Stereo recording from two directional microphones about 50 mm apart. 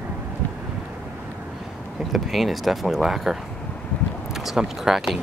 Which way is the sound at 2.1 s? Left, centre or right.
Centre.